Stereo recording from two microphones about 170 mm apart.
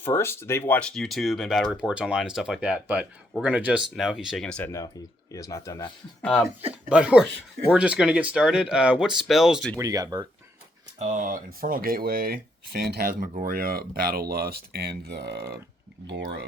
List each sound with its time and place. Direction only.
0.0 s speech: 15° left (ahead or behind)
5.3 s speech: 20° left (ahead or behind)
6.2 s speech: centre (ahead or behind)
9.7 s speech: 20° right (ahead or behind)
11.0 s speech: 50° right (ahead or behind); by 15.5 s 70° right (ahead or behind)
16.1 s speech: 85° right